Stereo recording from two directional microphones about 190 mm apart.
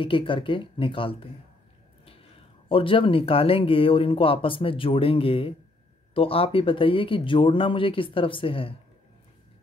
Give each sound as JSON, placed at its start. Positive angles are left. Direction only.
{"t": 0.0, "sound": "speech", "side_deg": 25}
{"t": 2.7, "sound": "speech", "side_deg": 25}